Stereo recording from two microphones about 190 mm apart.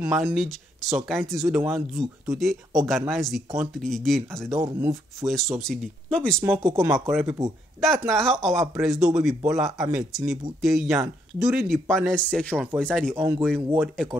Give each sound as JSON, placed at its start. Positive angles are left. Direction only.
{"t": 0.0, "sound": "speech", "side_deg": -5}
{"t": 6.7, "sound": "speech", "side_deg": -15}
{"t": 7.8, "sound": "speech", "side_deg": 0}
{"t": 13.1, "sound": "speech", "side_deg": -10}
{"t": 13.7, "sound": "speech", "side_deg": 0}